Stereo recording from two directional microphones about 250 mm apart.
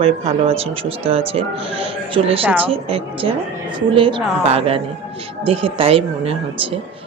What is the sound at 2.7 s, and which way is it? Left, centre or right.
A woman's voice, right.